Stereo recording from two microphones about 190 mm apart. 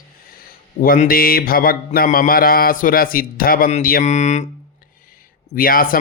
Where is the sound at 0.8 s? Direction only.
50° left (ahead or behind).